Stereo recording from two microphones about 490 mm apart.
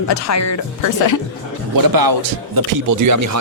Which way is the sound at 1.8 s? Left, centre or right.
Right.